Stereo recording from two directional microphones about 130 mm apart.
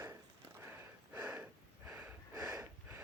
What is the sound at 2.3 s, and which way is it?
Snort, 30° right (ahead or behind).